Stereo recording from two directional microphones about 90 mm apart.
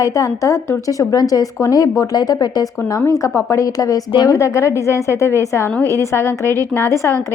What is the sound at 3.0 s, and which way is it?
A woman's voice, 35° left (ahead or behind).